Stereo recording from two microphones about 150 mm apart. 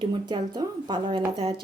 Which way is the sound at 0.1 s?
30° right (ahead or behind).